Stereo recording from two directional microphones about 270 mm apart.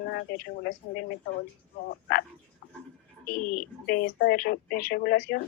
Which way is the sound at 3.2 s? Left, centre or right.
Left.